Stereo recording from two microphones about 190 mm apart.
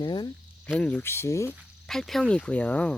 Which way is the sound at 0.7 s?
5° left (ahead or behind).